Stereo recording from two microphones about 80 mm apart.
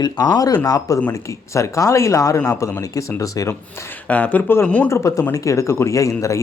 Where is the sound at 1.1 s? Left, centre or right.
Left.